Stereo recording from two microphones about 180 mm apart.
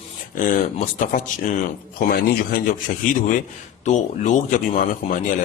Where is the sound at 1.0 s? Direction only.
45° left (ahead or behind).